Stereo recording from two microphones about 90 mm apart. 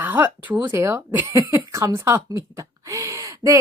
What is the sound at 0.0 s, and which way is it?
A child's voice, 20° right (ahead or behind).